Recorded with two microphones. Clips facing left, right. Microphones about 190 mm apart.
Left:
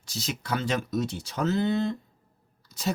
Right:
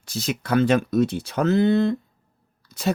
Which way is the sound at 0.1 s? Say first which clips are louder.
Right 8 dB; 55° right (ahead or behind).